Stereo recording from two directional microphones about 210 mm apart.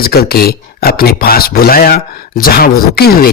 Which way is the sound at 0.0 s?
45° left (ahead or behind).